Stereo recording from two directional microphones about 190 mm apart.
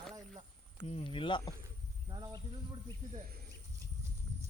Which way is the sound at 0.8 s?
30° left (ahead or behind).